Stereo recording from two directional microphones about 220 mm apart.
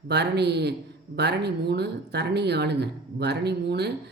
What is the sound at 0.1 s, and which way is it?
A man's voice, 50° right (ahead or behind).